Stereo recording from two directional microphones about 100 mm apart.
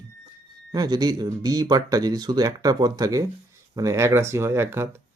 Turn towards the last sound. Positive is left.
turn(degrees=-25)  # may be behind; listen again after turning